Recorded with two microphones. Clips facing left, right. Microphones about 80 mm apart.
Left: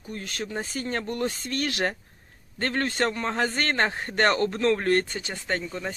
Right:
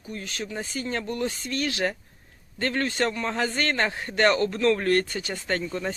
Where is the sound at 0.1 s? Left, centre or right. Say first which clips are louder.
Left 1 dB; left.